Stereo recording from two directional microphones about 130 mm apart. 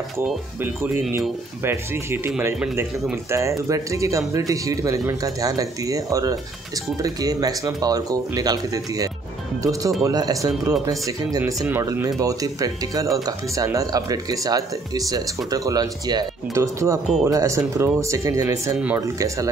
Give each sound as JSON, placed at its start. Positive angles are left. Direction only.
{"t": 1.6, "sound": "speech", "side_deg": -15}